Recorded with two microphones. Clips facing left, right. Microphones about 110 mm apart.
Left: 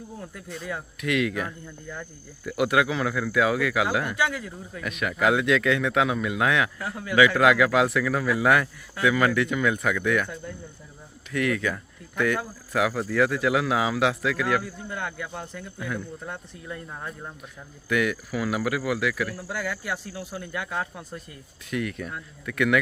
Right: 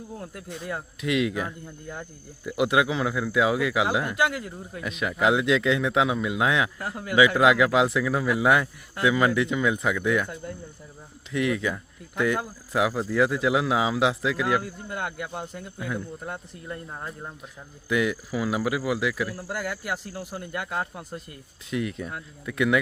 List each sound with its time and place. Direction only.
1.0 s speech: 25° right (ahead or behind)
4.4 s speech: 50° right (ahead or behind)
4.8 s speech: 25° right (ahead or behind)
6.7 s speech: 5° right (ahead or behind)
7.2 s speech: 20° right (ahead or behind)
11.3 s speech: 25° right (ahead or behind); by 16.7 s 5° right (ahead or behind)
17.8 s speech: 20° right (ahead or behind)
20.4 s speech: 5° right (ahead or behind)
21.7 s speech: 25° right (ahead or behind)